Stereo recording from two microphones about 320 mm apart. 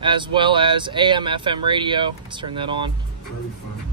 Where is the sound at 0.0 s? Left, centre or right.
Centre.